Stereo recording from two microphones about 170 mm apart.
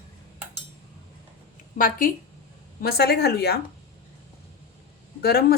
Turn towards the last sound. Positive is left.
turn(degrees=65)  # may be behind; listen again after turning